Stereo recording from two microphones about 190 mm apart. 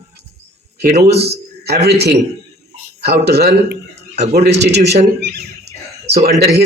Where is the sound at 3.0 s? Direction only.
60° right (ahead or behind).